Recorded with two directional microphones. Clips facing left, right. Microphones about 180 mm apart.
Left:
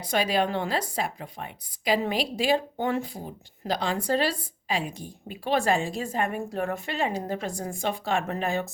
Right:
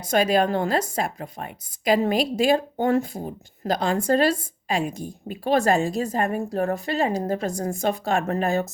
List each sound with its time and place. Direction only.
0.0 s a woman's voice: 45° right (ahead or behind)